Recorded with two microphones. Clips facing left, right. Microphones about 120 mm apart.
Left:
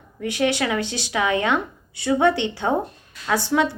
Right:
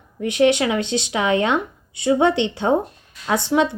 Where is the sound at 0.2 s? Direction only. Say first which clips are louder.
Right 5 dB; 20° right (ahead or behind).